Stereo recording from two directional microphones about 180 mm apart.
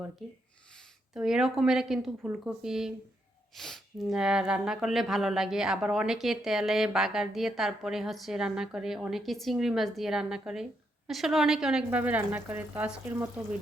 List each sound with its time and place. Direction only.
0.2 s speech: centre (ahead or behind)